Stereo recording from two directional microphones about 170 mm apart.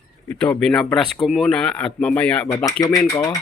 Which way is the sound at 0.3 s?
10° left (ahead or behind).